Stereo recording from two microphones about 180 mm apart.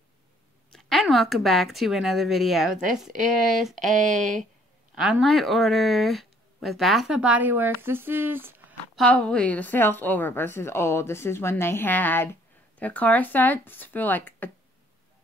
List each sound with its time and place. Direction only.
0.7 s speech: centre (ahead or behind)
2.7 s speech: 45° right (ahead or behind)
3.3 s speech: centre (ahead or behind)
3.8 s speech: 45° right (ahead or behind)
4.9 s speech: 5° right (ahead or behind)
8.9 s a woman's voice: 5° left (ahead or behind)